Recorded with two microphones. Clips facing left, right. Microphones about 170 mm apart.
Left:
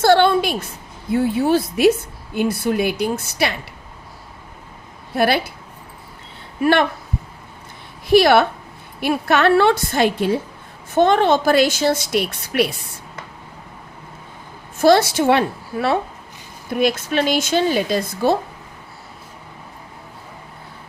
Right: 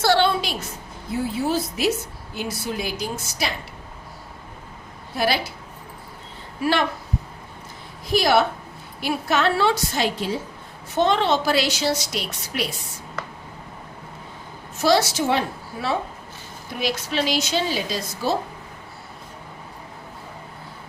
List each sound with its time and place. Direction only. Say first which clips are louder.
0.0 s a sound: left 6 dB; 50° left (ahead or behind)
1.1 s a woman's voice: left 7 dB; 60° left (ahead or behind)
5.1 s a woman's voice: left 5 dB; 55° left (ahead or behind)
6.6 s a woman's voice: left 6 dB; 55° left (ahead or behind)
8.0 s a woman's voice: left 6 dB; 65° left (ahead or behind)
14.8 s a woman's voice: left 6 dB; 55° left (ahead or behind)
16.8 s a woman's voice: left 6 dB; 50° left (ahead or behind)